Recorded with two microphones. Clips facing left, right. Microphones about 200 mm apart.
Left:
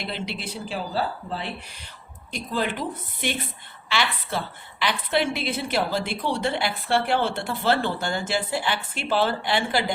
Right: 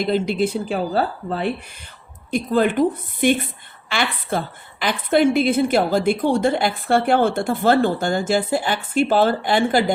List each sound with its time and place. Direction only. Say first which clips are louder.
0.0 s a woman's voice: right 13 dB; 45° right (ahead or behind)